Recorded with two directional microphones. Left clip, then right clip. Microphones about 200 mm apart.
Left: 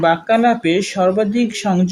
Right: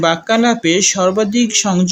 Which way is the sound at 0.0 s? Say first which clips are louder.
Even; 15° right (ahead or behind).